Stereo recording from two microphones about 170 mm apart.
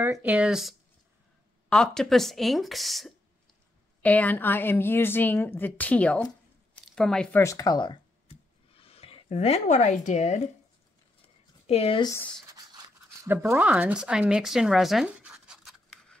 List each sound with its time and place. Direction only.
0.0 s a woman's voice: 10° right (ahead or behind); by 10.4 s 40° left (ahead or behind)
11.6 s speech: 35° left (ahead or behind)
12.1 s a woman's voice: 10° left (ahead or behind)
12.4 s toothbrush: 20° right (ahead or behind)
13.3 s speech: 10° right (ahead or behind)